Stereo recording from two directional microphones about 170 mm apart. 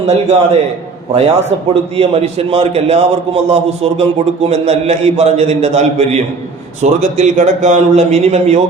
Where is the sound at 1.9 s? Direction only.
35° right (ahead or behind).